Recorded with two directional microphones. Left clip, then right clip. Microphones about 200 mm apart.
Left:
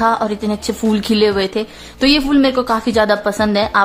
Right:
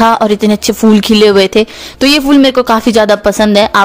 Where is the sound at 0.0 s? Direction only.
40° right (ahead or behind).